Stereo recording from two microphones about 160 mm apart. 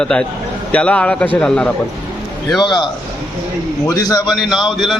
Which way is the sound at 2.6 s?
25° left (ahead or behind).